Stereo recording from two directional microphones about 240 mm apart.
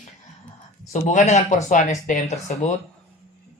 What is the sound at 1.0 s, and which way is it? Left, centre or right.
Speech, left.